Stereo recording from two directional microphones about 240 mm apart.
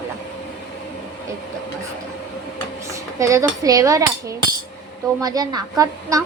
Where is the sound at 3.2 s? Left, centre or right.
Centre.